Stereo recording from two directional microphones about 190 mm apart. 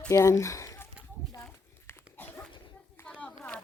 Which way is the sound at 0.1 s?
15° left (ahead or behind).